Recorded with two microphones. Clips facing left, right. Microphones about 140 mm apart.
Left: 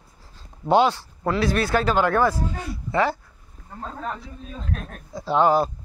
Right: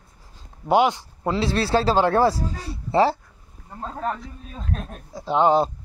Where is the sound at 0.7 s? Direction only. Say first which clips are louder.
Even; 15° right (ahead or behind); by 3.1 s 30° right (ahead or behind).